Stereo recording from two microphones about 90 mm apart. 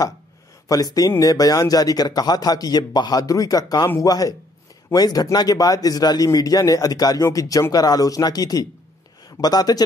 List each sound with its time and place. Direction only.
0.7 s a man's voice: 45° left (ahead or behind)